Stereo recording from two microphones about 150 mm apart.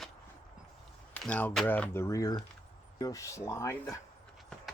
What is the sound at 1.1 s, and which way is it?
Speech, 10° left (ahead or behind).